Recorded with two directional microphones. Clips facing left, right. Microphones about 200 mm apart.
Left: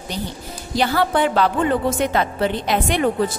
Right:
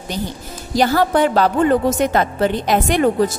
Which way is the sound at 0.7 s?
40° right (ahead or behind).